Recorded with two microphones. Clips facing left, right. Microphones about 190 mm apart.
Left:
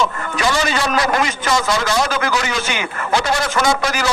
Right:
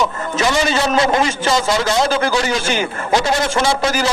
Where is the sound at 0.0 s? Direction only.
20° right (ahead or behind).